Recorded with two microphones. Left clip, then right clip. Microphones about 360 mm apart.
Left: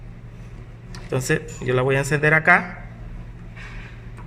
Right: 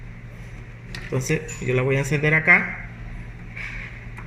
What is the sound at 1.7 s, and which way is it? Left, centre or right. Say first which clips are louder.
Speech: left 2 dB; left.